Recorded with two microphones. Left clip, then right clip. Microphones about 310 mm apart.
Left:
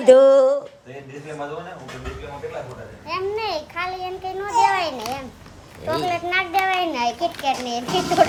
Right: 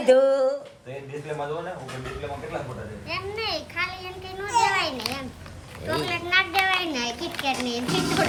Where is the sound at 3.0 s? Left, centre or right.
Left.